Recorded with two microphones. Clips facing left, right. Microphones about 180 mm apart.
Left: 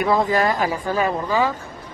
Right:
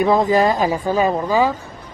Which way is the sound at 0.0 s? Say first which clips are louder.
Right 4 dB; 20° right (ahead or behind).